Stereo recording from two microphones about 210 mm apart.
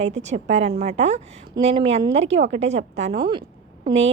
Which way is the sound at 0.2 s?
35° right (ahead or behind).